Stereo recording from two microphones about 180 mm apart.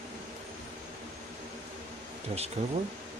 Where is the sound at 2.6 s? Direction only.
40° right (ahead or behind).